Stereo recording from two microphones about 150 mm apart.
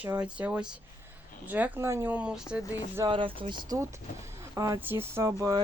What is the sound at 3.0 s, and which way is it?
Speech, 35° right (ahead or behind).